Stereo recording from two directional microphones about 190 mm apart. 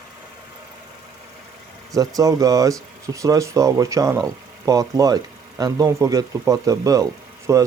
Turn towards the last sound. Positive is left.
turn(degrees=-15)  # may be behind; listen again after turning